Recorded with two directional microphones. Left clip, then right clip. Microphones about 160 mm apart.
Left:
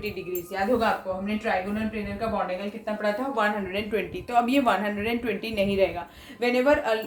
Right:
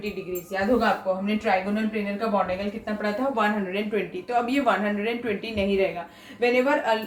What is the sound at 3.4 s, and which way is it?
Speech, 40° left (ahead or behind).